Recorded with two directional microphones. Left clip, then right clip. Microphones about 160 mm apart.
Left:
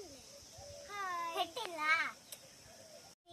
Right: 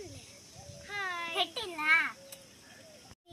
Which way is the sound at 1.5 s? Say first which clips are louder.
Right 8 dB; 90° left.